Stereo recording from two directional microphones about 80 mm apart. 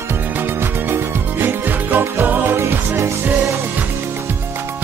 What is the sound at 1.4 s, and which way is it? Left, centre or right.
Music, right.